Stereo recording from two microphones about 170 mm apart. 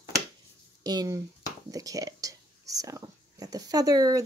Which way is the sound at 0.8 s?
20° right (ahead or behind).